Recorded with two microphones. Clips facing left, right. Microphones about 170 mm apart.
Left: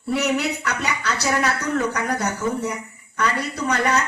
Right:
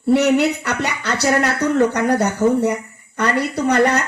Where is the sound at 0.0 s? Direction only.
60° right (ahead or behind).